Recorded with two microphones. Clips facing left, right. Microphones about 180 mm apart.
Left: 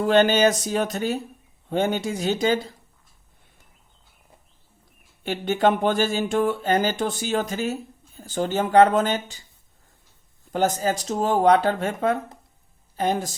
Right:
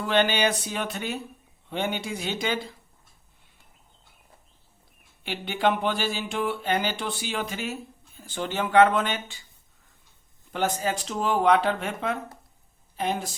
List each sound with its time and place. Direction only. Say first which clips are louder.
0.0 s speech: left 6 dB; 40° left (ahead or behind)
5.2 s speech: left 5 dB; 45° left (ahead or behind)
10.5 s a woman's voice: left 4 dB; 40° left (ahead or behind)